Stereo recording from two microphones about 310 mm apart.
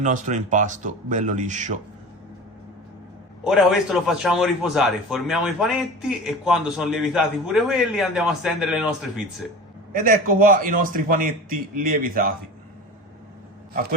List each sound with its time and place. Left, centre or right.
0.0 s a man's voice: right
3.4 s a man's voice: centre
9.9 s a man's voice: right